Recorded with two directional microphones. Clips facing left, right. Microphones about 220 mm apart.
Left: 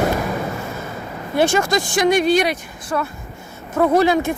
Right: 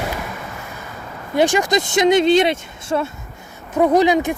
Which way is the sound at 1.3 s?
15° right (ahead or behind).